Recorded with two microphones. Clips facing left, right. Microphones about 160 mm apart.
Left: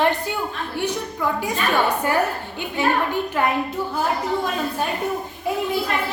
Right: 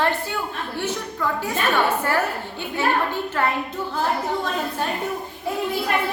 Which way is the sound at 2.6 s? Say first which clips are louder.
Left 1 dB; 15° left (ahead or behind).